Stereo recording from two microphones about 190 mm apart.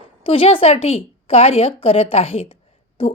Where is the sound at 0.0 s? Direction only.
30° left (ahead or behind).